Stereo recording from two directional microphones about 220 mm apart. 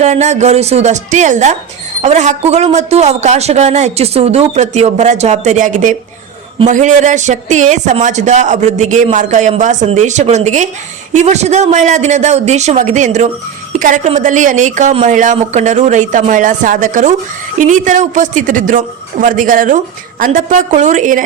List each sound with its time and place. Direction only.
0.0 s speech: 30° right (ahead or behind)